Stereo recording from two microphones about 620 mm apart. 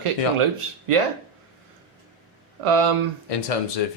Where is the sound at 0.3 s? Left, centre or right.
Right.